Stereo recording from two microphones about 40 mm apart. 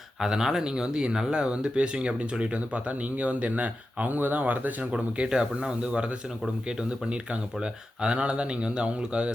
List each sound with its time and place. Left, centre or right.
0.2 s speech: centre; by 4.9 s right
4.9 s speech: right